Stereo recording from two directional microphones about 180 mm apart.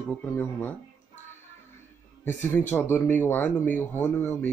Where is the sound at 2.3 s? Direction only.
10° left (ahead or behind).